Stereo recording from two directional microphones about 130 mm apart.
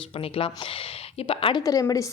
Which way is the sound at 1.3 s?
45° left (ahead or behind).